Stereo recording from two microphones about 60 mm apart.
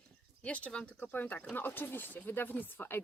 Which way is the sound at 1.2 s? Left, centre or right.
Left.